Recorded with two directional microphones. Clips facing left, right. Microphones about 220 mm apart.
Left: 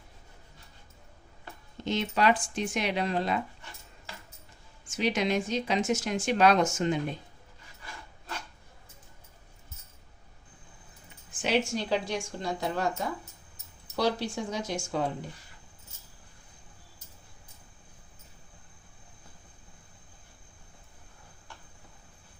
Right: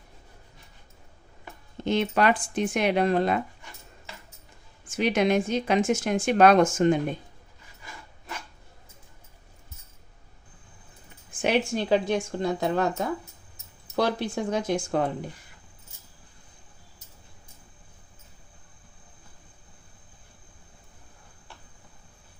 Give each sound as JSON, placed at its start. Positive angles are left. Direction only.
{"t": 1.8, "sound": "speech", "side_deg": -55}
{"t": 4.9, "sound": "a woman's voice", "side_deg": -55}
{"t": 11.4, "sound": "speech", "side_deg": -55}